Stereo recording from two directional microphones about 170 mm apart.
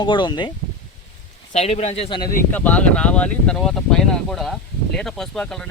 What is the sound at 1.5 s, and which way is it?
Speech, 40° left (ahead or behind).